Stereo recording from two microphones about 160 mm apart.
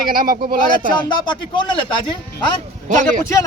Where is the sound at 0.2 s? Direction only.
60° right (ahead or behind).